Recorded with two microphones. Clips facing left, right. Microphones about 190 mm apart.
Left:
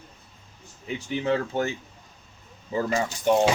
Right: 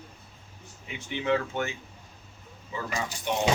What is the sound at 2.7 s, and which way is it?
Speech, 40° left (ahead or behind).